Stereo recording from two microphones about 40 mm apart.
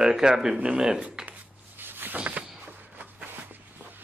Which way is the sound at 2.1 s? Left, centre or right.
Right.